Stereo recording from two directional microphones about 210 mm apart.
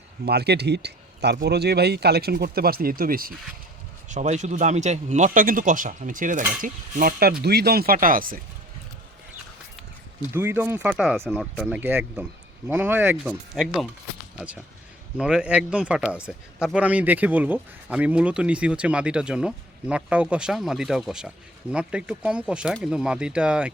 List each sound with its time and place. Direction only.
0.3 s speech: 50° right (ahead or behind)
10.3 s speech: 10° right (ahead or behind)